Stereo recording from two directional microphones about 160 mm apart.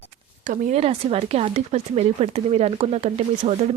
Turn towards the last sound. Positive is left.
turn(degrees=-40)  # may be behind; listen again after turning